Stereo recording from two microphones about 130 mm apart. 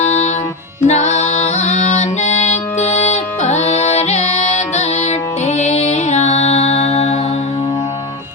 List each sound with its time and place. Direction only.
0.0 s music: 60° left (ahead or behind)